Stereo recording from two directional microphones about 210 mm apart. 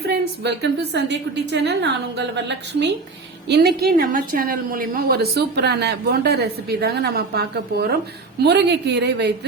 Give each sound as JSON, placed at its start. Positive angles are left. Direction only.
{"t": 0.1, "sound": "a woman's voice", "side_deg": -50}